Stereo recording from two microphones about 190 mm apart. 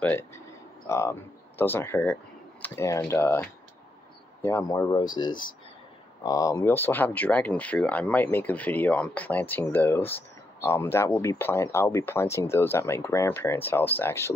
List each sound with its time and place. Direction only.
0.0 s speech: 10° left (ahead or behind)